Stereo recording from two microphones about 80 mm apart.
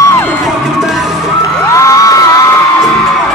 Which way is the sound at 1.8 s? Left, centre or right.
Left.